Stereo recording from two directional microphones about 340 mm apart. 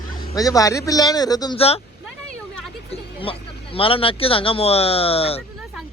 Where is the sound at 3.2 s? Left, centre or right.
Centre.